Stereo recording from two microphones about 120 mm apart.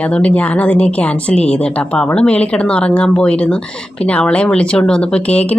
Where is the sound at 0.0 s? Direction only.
10° left (ahead or behind).